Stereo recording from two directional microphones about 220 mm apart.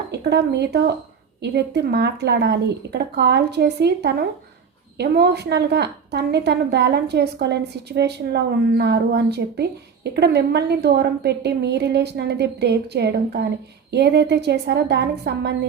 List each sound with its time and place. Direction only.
0.1 s a woman's voice: 50° right (ahead or behind)